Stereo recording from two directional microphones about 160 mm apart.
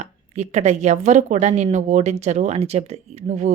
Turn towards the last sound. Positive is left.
turn(degrees=-45)  # may be behind; listen again after turning